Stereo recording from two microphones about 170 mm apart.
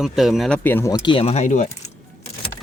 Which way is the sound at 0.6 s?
10° left (ahead or behind).